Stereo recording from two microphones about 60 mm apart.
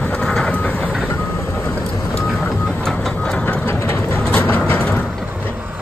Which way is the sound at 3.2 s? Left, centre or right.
Centre.